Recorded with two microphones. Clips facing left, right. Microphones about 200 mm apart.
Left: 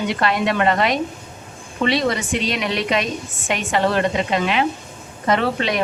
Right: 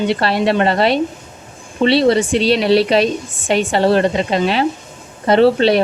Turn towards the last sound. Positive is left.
turn(degrees=-30)  # may be behind; listen again after turning